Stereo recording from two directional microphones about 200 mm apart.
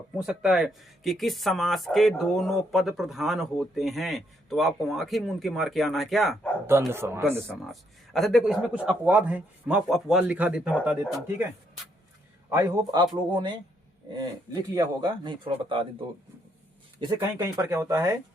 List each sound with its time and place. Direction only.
0.2 s speech: 5° right (ahead or behind)
6.7 s speech: 10° right (ahead or behind)
7.4 s speech: centre (ahead or behind)
12.5 s speech: 15° right (ahead or behind)
14.7 s speech: 20° right (ahead or behind)
17.3 s speech: 15° right (ahead or behind)